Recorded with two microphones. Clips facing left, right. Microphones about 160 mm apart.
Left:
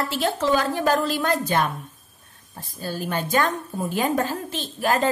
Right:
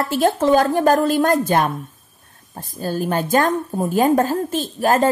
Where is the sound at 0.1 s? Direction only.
45° right (ahead or behind).